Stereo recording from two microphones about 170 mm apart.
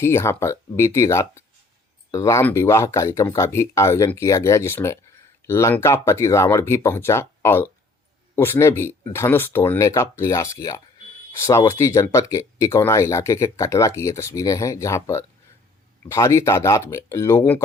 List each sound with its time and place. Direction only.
0.0 s speech: 15° left (ahead or behind)